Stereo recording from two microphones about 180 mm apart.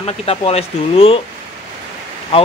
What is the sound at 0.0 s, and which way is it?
Speech, 35° left (ahead or behind).